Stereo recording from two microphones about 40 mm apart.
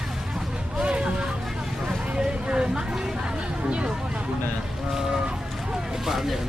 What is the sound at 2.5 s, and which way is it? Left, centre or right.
Speech, right.